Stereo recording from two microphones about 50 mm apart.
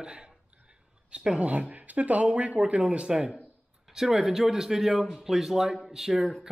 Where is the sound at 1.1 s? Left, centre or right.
Right.